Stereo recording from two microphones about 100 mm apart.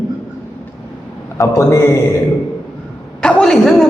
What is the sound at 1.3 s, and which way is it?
Speech, 30° left (ahead or behind).